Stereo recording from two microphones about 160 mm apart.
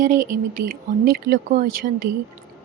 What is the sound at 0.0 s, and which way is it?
Speech, 55° right (ahead or behind).